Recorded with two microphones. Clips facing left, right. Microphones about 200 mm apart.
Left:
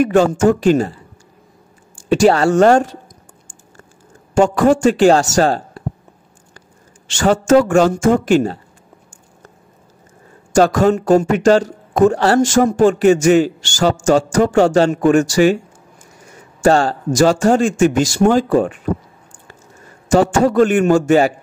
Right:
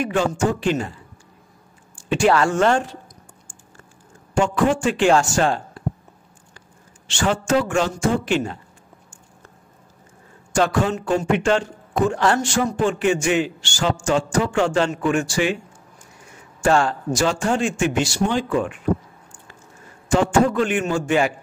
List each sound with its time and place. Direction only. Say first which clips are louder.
0.0 s a man's voice: left 8 dB; 45° left (ahead or behind)
2.0 s a man's voice: left 6 dB; 40° left (ahead or behind)
4.4 s a man's voice: left 7 dB; 40° left (ahead or behind)
7.2 s a man's voice: left 8 dB; 45° left (ahead or behind)
10.5 s a man's voice: left 7 dB; 40° left (ahead or behind)
16.6 s a man's voice: left 5 dB; 35° left (ahead or behind)
20.1 s a man's voice: left 4 dB; 40° left (ahead or behind)